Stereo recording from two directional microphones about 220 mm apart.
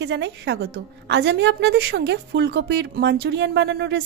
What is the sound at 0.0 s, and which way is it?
A woman's voice, 50° right (ahead or behind).